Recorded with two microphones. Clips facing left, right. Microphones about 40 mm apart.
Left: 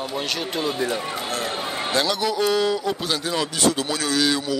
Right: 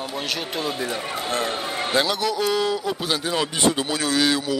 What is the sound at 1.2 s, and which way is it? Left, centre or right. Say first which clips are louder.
Run: right 6 dB; right.